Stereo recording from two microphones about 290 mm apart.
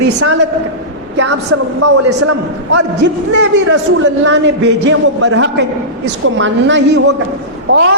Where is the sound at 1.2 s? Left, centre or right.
Right.